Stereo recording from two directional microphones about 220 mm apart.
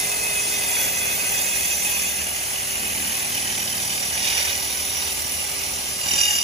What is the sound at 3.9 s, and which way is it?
Ratchet, 30° right (ahead or behind).